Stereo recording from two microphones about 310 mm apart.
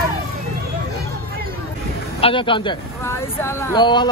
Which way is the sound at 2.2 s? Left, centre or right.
Centre.